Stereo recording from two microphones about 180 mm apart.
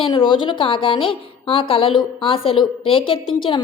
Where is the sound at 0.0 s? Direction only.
30° left (ahead or behind).